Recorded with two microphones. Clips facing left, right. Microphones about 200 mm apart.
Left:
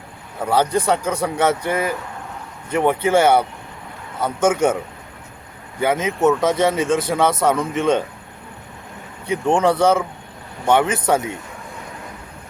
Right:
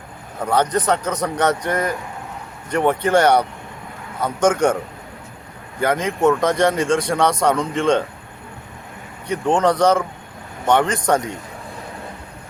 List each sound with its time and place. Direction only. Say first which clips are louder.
0.4 s speech: left 1 dB; 5° left (ahead or behind)
5.8 s speech: even; 5° left (ahead or behind)
9.2 s speech: even; 10° left (ahead or behind)